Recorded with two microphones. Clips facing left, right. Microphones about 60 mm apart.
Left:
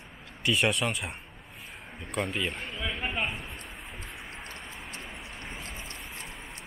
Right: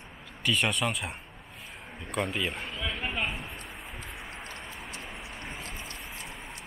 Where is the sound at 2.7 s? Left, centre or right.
Centre.